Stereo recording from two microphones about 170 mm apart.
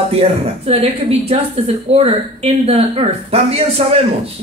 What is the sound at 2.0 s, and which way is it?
Speech, 35° right (ahead or behind).